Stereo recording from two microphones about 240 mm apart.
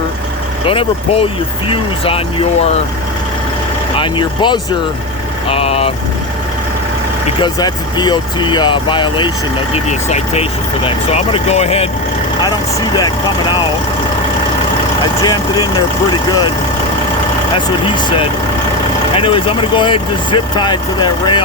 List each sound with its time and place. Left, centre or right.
0.6 s speech: left
3.9 s speech: centre
7.4 s speech: centre
13.0 s speech: centre
15.2 s speech: centre
17.8 s speech: left